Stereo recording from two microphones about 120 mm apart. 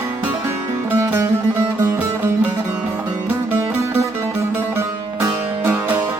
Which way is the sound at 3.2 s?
20° right (ahead or behind).